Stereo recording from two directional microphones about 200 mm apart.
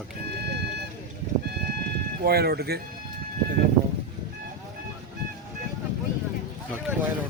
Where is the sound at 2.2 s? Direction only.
50° right (ahead or behind).